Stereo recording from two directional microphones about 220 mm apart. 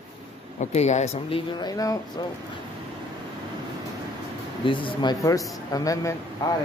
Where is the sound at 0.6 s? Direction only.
30° left (ahead or behind); by 2.0 s 15° left (ahead or behind).